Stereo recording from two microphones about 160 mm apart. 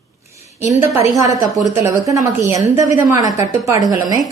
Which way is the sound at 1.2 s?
25° right (ahead or behind).